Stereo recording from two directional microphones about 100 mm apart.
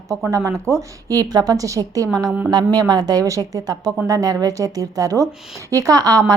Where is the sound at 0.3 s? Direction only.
30° right (ahead or behind).